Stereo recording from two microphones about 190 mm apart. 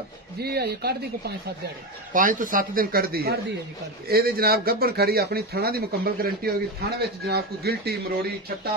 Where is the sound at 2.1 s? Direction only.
45° right (ahead or behind).